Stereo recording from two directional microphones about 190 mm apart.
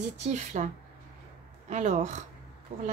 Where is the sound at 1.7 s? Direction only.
40° right (ahead or behind).